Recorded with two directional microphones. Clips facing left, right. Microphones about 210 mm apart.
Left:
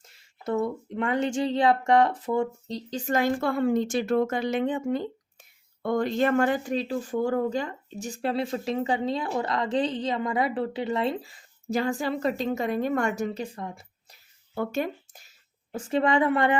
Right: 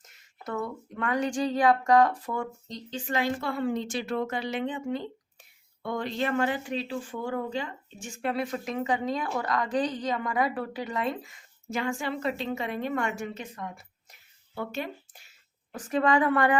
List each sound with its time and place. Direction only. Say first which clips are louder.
0.0 s speech: left 6 dB; 25° left (ahead or behind)
2.7 s a woman's voice: left 4 dB; 40° left (ahead or behind)
14.5 s speech: left 6 dB; 45° left (ahead or behind)
15.7 s a woman's voice: left 1 dB; 25° left (ahead or behind)